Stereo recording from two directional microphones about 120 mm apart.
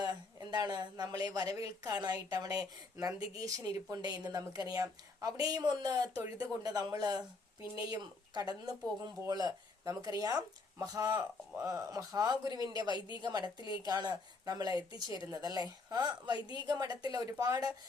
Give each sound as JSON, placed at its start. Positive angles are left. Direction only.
{"t": 0.0, "sound": "speech", "side_deg": -35}
{"t": 12.9, "sound": "a woman's voice", "side_deg": 40}
{"t": 13.2, "sound": "speech", "side_deg": -35}